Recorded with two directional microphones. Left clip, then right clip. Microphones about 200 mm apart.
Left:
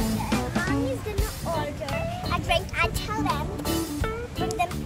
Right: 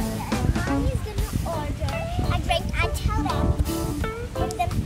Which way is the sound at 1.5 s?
Centre (ahead or behind).